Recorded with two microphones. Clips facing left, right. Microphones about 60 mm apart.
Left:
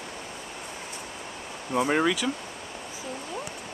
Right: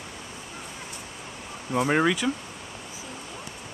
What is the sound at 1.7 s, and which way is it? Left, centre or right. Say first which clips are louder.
Speech: right 1 dB; centre.